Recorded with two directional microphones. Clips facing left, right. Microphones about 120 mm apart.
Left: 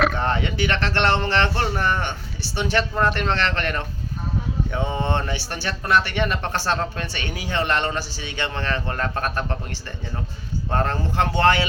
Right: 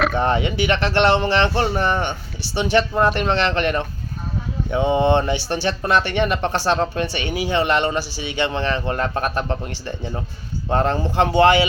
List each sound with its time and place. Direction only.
0.1 s speech: 15° right (ahead or behind)